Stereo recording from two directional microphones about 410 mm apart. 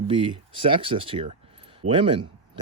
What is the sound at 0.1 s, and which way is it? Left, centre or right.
Speech, centre.